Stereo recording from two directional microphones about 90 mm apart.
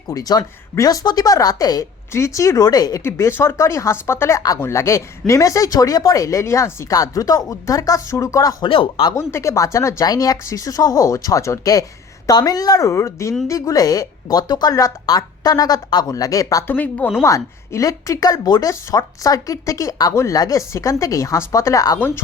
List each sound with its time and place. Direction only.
0.1 s speech: 45° left (ahead or behind)
3.0 s speech: 30° left (ahead or behind)
4.4 s speech: 40° left (ahead or behind)
8.6 s speech: 75° left (ahead or behind)
9.1 s speech: 30° left (ahead or behind)
16.6 s speech: 20° left (ahead or behind)
17.2 s speech: 35° left (ahead or behind)